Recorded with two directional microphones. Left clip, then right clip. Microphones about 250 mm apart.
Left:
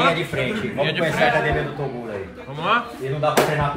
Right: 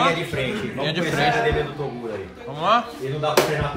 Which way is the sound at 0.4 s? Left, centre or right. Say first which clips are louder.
Left 3 dB; centre.